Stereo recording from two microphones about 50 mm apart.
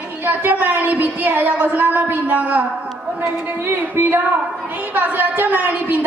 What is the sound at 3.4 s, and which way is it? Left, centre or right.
A woman's voice, right.